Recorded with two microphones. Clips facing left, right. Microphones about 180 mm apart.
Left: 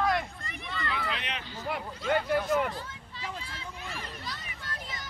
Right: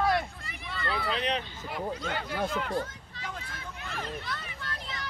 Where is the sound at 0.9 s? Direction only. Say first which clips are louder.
Right 7 dB; 35° right (ahead or behind).